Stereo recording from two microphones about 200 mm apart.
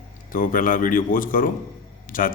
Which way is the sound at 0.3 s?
40° left (ahead or behind).